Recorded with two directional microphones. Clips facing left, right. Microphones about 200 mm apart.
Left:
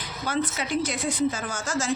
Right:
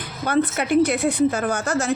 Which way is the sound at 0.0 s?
60° right (ahead or behind).